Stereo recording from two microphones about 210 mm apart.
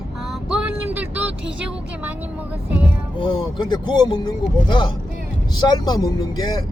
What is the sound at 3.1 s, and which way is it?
Speech, 25° left (ahead or behind).